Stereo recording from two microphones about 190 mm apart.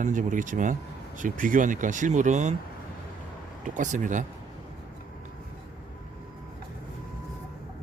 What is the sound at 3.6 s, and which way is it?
Speech, 40° right (ahead or behind).